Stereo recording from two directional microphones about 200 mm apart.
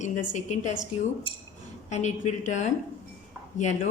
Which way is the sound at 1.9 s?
35° left (ahead or behind).